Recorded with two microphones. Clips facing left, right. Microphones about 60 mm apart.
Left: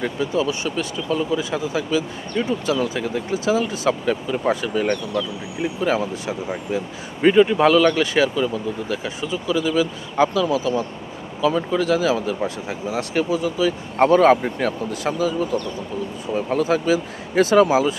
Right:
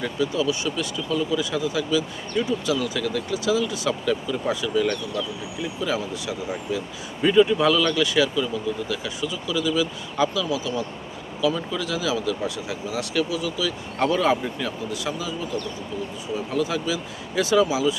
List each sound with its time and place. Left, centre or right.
0.0 s speech: left